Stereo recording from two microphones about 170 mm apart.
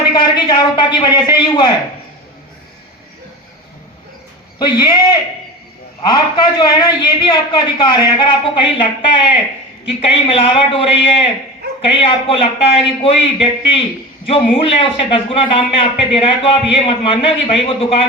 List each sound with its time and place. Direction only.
0.1 s a man's voice: 25° left (ahead or behind)
4.5 s a man's voice: 25° left (ahead or behind)
6.1 s a man's voice: 25° left (ahead or behind)